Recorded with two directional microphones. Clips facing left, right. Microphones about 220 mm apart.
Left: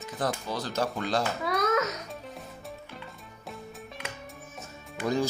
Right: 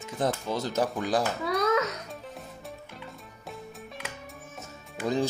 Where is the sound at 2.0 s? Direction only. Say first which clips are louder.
Even; centre (ahead or behind).